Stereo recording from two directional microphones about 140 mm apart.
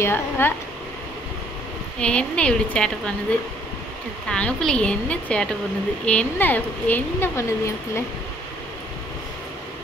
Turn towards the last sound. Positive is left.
turn(degrees=20)  # may be behind; listen again after turning